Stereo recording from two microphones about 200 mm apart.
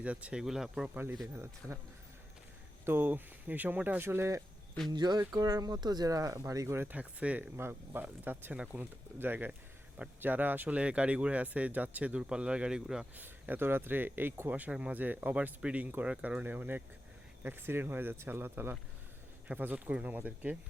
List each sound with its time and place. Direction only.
0.0 s speech: 5° right (ahead or behind)
2.8 s speech: 10° right (ahead or behind)